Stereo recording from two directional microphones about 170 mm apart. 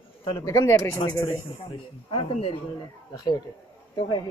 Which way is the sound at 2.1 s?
35° left (ahead or behind).